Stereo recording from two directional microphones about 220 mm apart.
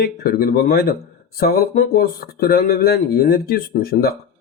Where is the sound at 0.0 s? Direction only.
45° left (ahead or behind).